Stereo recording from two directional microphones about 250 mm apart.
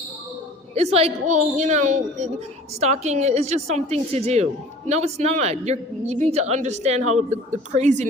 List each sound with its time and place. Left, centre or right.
0.7 s a woman's voice: right